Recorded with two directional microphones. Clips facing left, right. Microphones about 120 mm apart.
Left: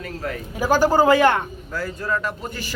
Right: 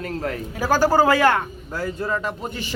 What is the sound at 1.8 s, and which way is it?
Speech, 25° right (ahead or behind).